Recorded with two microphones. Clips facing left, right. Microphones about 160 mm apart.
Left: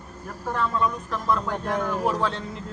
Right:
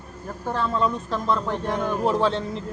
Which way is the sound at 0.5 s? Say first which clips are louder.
Right 1 dB; 30° right (ahead or behind).